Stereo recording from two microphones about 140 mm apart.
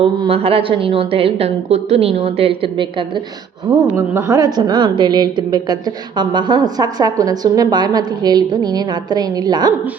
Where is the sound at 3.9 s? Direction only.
15° right (ahead or behind).